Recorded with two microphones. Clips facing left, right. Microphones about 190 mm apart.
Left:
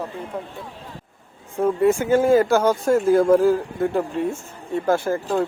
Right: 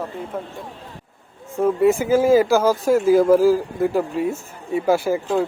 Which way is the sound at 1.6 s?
Centre (ahead or behind).